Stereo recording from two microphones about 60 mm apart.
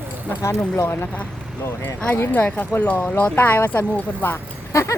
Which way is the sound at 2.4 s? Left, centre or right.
Left.